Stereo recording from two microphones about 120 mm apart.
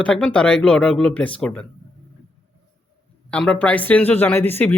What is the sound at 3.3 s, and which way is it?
Speech, 10° left (ahead or behind).